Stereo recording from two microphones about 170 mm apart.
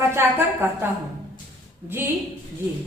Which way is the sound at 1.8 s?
15° right (ahead or behind).